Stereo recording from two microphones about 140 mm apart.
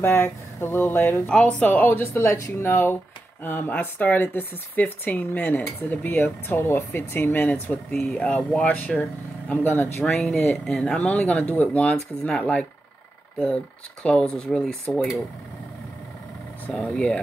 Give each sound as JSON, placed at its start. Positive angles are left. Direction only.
{"t": 0.0, "sound": "speech", "side_deg": 15}
{"t": 10.0, "sound": "speech", "side_deg": 0}
{"t": 14.0, "sound": "speech", "side_deg": 5}
{"t": 16.6, "sound": "speech", "side_deg": 10}